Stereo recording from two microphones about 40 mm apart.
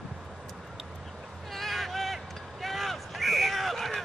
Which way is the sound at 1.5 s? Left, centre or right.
Centre.